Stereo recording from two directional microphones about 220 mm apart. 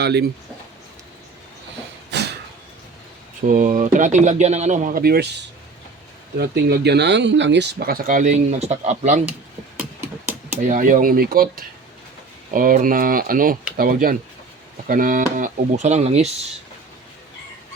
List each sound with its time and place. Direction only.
0.0 s speech: 50° right (ahead or behind)
2.1 s a sound: 50° right (ahead or behind)
3.5 s speech: 35° right (ahead or behind)
10.6 s speech: 35° right (ahead or behind)